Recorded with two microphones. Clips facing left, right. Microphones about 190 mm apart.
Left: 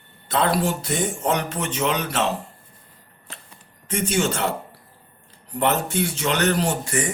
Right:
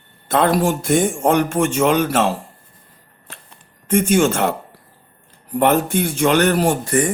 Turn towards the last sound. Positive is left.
turn(degrees=-50)  # may be behind; listen again after turning